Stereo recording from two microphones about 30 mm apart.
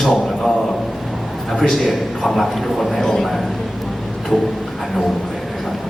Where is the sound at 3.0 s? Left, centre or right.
Centre.